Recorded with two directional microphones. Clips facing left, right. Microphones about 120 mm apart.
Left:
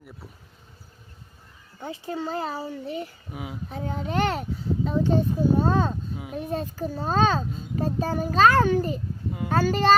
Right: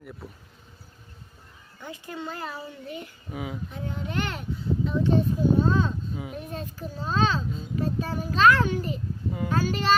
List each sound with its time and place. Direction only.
1.8 s a child's voice: 30° left (ahead or behind)
3.3 s speech: 5° left (ahead or behind)
3.7 s a child's voice: 40° left (ahead or behind)